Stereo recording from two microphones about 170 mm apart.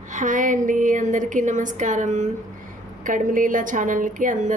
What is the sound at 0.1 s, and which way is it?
A woman's voice, 50° right (ahead or behind).